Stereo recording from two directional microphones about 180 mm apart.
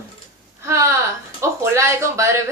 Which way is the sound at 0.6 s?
15° right (ahead or behind).